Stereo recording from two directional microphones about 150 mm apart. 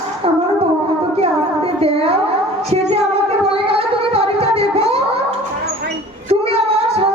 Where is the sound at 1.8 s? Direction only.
40° right (ahead or behind).